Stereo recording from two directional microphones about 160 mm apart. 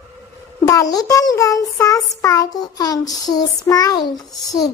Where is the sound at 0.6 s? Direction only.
20° left (ahead or behind).